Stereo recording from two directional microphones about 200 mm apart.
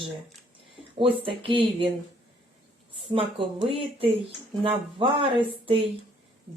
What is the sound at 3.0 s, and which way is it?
Speech, 25° right (ahead or behind).